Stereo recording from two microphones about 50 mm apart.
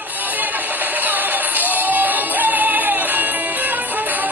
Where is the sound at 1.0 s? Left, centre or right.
Right.